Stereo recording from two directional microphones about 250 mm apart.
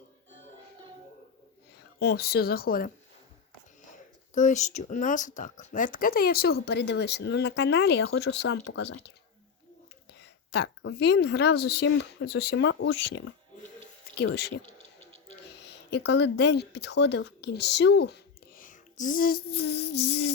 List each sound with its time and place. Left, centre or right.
2.0 s speech: left
4.4 s speech: left
10.2 s a woman's voice: left
14.3 s speech: left
15.9 s speech: left